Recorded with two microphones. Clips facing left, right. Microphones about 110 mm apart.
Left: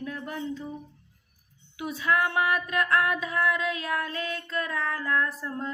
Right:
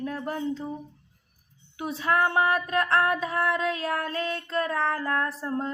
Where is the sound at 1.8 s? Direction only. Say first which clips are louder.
Right 2 dB; 35° right (ahead or behind).